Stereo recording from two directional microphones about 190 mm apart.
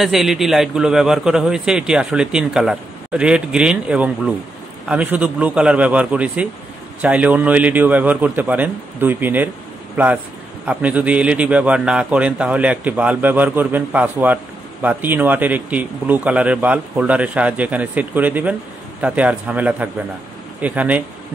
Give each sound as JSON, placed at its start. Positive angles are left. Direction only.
{"t": 0.0, "sound": "a man's voice", "side_deg": 0}